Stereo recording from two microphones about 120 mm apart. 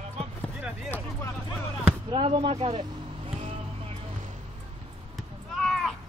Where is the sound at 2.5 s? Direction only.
50° right (ahead or behind).